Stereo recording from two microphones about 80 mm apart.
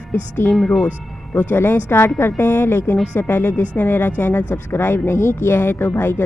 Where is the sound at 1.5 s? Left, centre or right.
Left.